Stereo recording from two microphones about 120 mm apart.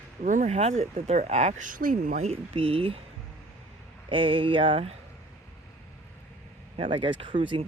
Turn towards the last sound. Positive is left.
turn(degrees=-45)  # may be behind; listen again after turning